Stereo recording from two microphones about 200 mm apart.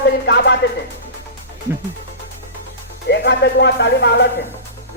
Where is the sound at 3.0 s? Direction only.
60° left (ahead or behind).